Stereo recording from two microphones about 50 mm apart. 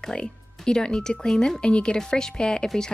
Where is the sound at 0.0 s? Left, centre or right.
Centre.